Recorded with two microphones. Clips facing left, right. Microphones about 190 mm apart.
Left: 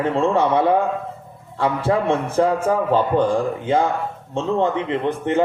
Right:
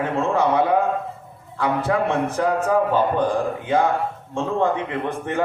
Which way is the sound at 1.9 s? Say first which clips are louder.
Left 3 dB; 30° left (ahead or behind).